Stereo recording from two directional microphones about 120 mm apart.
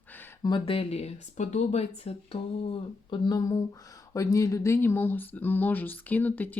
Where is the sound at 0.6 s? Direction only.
55° left (ahead or behind).